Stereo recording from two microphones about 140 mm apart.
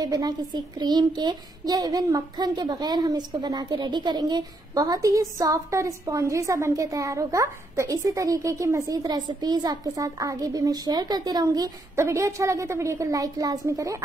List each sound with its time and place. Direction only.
0.0 s a child's voice: 30° right (ahead or behind)